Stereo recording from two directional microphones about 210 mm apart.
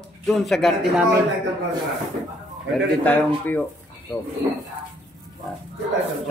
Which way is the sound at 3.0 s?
10° left (ahead or behind).